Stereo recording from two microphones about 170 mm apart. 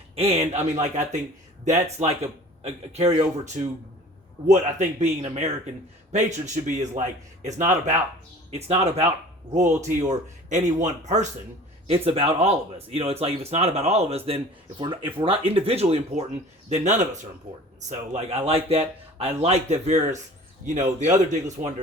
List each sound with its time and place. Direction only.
0.2 s a man's voice: 35° right (ahead or behind)